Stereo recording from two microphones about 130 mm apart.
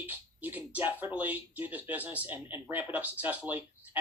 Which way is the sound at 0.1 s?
15° right (ahead or behind).